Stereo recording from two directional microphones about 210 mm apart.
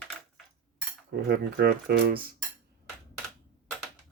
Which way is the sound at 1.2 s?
50° right (ahead or behind).